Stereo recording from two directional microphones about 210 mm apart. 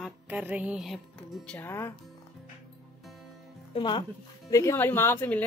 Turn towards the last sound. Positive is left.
turn(degrees=10)  # may be behind; listen again after turning